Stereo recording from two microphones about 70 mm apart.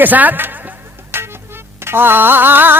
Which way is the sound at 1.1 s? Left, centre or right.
Right.